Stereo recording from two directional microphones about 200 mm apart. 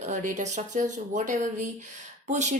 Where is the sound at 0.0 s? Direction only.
40° right (ahead or behind).